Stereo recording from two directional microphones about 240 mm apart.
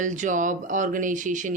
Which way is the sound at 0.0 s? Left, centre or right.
Right.